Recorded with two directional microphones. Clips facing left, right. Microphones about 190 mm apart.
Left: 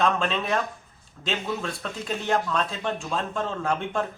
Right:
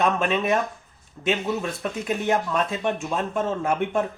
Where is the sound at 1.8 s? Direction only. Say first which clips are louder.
Right 5 dB; 15° right (ahead or behind).